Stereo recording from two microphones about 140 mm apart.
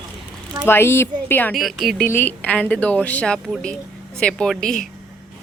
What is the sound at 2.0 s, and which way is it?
A woman's voice, 15° left (ahead or behind).